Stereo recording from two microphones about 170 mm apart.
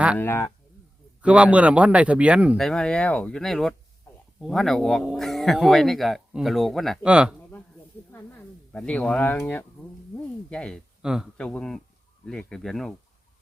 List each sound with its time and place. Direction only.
0.2 s speech: 15° left (ahead or behind)
1.2 s a man's voice: 5° right (ahead or behind)
2.6 s speech: 5° left (ahead or behind)
8.1 s speech: 10° left (ahead or behind)